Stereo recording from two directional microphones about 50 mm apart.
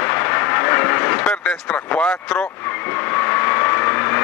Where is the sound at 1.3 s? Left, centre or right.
Centre.